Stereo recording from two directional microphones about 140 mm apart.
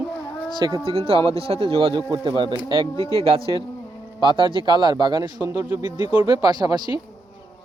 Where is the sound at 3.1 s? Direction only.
45° right (ahead or behind).